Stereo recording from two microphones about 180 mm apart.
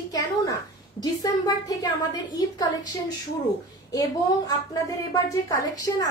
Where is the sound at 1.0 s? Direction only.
20° left (ahead or behind).